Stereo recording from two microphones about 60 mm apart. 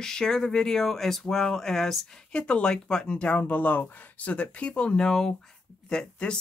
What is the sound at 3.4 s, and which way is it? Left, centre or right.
Speech, left.